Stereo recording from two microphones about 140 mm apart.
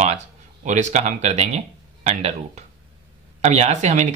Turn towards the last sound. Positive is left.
turn(degrees=-55)  # may be behind; listen again after turning